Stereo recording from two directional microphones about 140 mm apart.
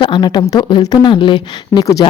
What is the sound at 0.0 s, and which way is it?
Speech, 35° left (ahead or behind).